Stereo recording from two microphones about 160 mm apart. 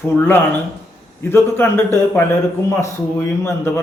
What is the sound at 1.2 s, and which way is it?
Speech, 15° left (ahead or behind).